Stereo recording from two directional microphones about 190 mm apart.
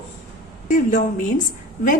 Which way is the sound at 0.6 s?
45° left (ahead or behind).